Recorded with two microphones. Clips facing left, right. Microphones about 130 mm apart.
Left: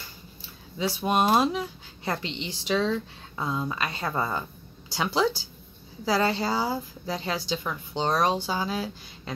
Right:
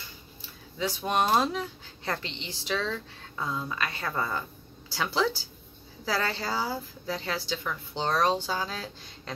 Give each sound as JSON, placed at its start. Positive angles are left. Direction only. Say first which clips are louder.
{"t": 0.7, "sound": "speech", "louder": "left 3 dB", "side_deg": 10}